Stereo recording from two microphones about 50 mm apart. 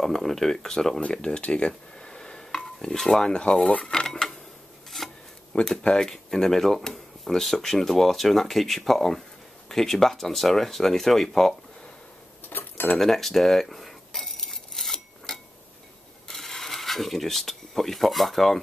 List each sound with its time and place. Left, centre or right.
0.0 s speech: centre; by 3.8 s left
3.8 s speech: centre
4.9 s rub: centre
5.6 s speech: centre
12.4 s cutlery: left
12.9 s a sound: centre
16.3 s speech: centre